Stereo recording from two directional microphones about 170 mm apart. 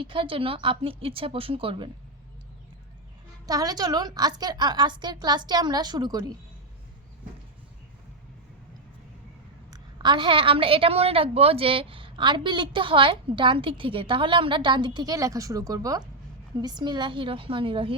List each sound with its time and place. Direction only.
0.0 s a woman's voice: 30° right (ahead or behind)
3.4 s a woman's voice: 20° right (ahead or behind)
9.6 s a woman's voice: 25° right (ahead or behind)